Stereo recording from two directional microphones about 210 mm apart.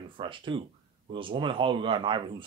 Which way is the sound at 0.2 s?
25° right (ahead or behind).